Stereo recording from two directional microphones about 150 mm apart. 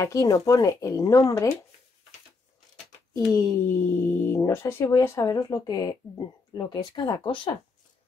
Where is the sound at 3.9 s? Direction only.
15° left (ahead or behind); by 7.5 s 35° left (ahead or behind).